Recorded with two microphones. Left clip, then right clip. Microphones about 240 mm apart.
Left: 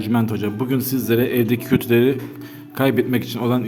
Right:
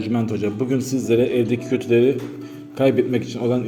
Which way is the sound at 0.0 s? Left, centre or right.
Left.